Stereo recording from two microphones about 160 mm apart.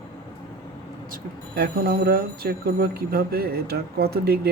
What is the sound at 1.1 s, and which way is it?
Speech, 70° right (ahead or behind).